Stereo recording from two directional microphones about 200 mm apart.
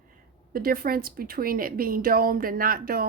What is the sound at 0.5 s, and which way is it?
A woman's voice, 45° right (ahead or behind).